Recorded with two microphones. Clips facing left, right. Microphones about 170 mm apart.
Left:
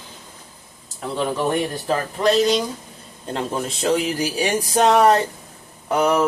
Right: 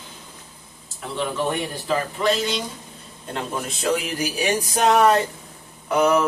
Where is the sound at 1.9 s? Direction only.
40° left (ahead or behind).